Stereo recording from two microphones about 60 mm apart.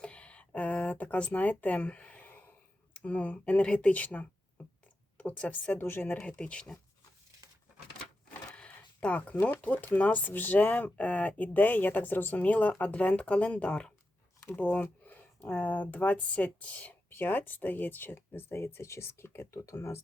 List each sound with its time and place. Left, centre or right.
0.0 s a sound: centre
2.9 s speech: left
5.8 s speech: left
6.1 s speech: centre
8.3 s speech: centre
17.1 s speech: left
19.5 s speech: left